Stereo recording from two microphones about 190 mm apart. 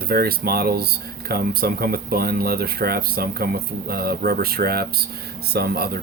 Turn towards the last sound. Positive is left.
turn(degrees=-55)  # may be behind; listen again after turning